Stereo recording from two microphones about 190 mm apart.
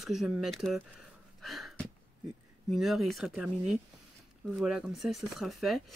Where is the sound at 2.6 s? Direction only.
Centre (ahead or behind).